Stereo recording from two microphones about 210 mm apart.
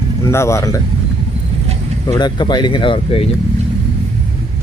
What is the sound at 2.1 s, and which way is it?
Speech, 20° left (ahead or behind).